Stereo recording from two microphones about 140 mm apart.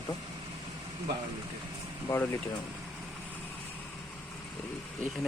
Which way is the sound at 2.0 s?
20° left (ahead or behind).